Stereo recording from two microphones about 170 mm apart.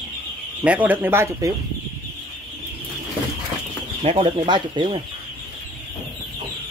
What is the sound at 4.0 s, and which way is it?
Speech, 35° right (ahead or behind).